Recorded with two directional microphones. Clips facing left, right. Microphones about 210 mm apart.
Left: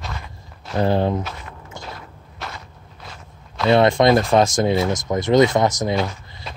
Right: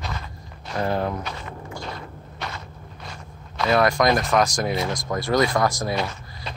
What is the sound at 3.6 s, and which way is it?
Speech, 25° left (ahead or behind).